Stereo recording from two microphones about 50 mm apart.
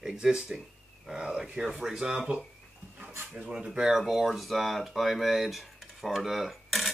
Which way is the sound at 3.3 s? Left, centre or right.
Right.